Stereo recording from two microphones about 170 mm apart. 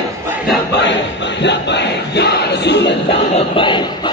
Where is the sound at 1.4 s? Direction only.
90° left.